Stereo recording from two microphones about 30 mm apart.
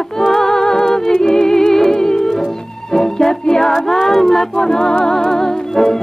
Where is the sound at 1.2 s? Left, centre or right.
Centre.